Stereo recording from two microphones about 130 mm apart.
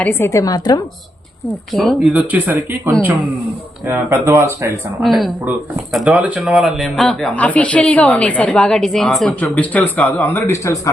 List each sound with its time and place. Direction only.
0.0 s a woman's voice: 15° left (ahead or behind)
1.7 s speech: centre (ahead or behind)
2.1 s speech: 10° right (ahead or behind)
5.0 s speech: centre (ahead or behind)
9.4 s speech: 10° left (ahead or behind)